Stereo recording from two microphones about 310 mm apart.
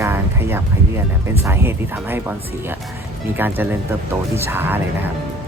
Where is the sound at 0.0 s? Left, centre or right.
Centre.